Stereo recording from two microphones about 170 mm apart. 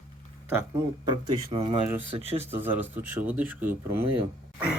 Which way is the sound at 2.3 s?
10° right (ahead or behind).